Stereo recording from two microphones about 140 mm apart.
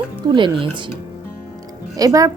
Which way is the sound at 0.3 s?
35° right (ahead or behind).